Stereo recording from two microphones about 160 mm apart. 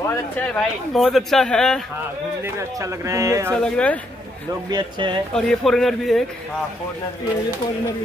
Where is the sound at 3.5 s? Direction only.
5° left (ahead or behind).